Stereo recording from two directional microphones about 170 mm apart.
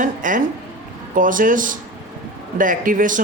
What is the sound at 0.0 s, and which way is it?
Speech, 50° right (ahead or behind).